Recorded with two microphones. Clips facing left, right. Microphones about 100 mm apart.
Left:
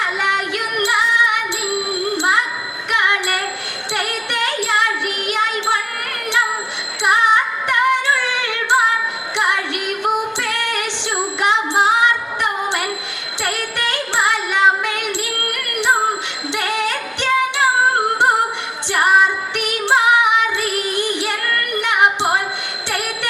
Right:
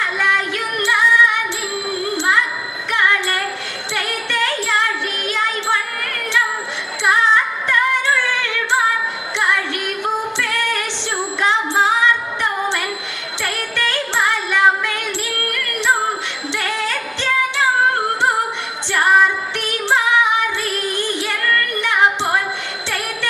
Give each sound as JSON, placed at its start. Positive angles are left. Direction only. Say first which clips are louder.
{"t": 0.2, "sound": "music", "louder": "even", "side_deg": 20}
{"t": 7.0, "sound": "music", "louder": "left 1 dB", "side_deg": 20}
{"t": 16.5, "sound": "music", "louder": "left 2 dB", "side_deg": 20}
{"t": 18.9, "sound": "music", "louder": "even", "side_deg": 20}